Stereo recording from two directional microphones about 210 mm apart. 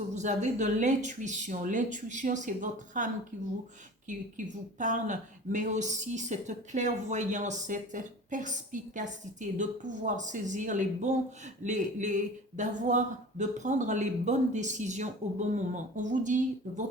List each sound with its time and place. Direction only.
0.1 s speech: 35° right (ahead or behind)
4.1 s speech: 35° right (ahead or behind)